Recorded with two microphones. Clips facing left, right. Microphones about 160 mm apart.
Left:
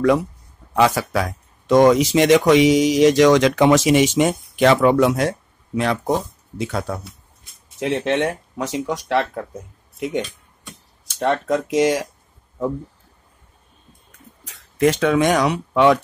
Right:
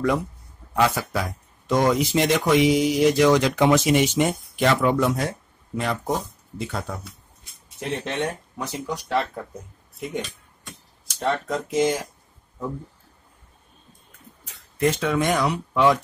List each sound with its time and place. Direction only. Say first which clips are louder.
0.7 s speech: left 4 dB; 90° left
11.7 s speech: left 3 dB; 80° left
14.4 s speech: left 5 dB; 90° left; by 16.0 s 70° left (ahead or behind)